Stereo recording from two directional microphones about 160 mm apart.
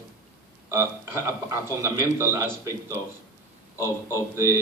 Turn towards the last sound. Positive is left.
turn(degrees=-15)  # may be behind; listen again after turning